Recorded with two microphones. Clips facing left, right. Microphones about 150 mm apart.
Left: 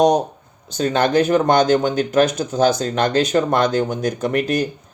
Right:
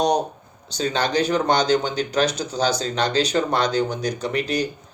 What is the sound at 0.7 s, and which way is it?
Speech, 50° left (ahead or behind).